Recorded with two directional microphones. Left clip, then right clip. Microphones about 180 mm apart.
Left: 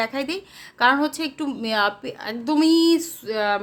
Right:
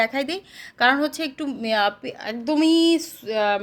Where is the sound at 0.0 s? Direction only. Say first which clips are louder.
Right 2 dB; 15° right (ahead or behind).